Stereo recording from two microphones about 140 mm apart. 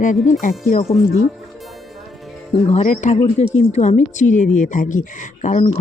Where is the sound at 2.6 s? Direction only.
55° left (ahead or behind).